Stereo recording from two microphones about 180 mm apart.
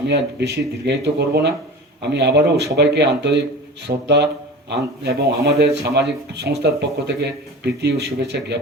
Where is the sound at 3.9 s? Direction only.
40° right (ahead or behind).